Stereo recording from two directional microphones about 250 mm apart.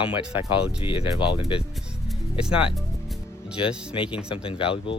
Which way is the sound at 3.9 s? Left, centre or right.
Left.